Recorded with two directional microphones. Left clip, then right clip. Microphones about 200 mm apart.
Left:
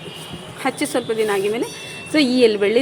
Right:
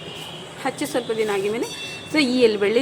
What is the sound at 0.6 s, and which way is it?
A woman's voice, 20° left (ahead or behind).